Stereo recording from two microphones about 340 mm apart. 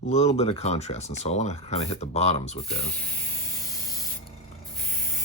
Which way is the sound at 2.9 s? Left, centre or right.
Centre.